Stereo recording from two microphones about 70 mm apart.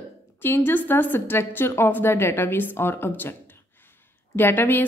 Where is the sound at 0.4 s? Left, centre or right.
Left.